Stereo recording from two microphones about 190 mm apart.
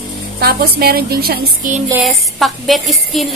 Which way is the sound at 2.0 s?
Centre (ahead or behind).